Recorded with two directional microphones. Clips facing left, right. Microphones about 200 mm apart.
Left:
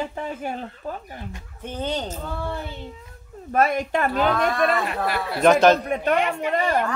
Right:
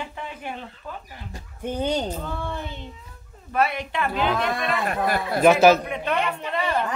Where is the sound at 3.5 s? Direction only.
45° left (ahead or behind).